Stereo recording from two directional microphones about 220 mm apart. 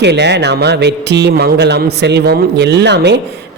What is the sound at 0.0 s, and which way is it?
Speech, 50° right (ahead or behind).